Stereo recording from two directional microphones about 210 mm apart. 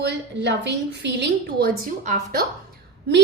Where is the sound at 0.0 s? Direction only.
55° right (ahead or behind).